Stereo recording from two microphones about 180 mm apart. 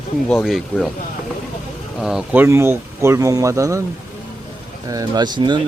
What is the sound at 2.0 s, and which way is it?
Speech, 5° right (ahead or behind).